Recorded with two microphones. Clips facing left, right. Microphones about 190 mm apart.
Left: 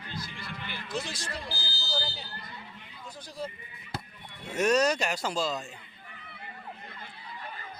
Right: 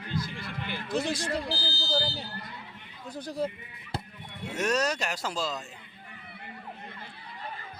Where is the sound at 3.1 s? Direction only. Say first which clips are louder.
Right 7 dB; 60° right (ahead or behind).